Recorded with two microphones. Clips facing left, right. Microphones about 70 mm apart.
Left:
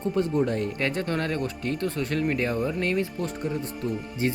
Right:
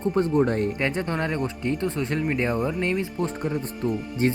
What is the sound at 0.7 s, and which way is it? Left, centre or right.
Speech, right.